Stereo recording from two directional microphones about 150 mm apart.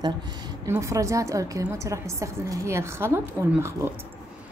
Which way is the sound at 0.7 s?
20° right (ahead or behind).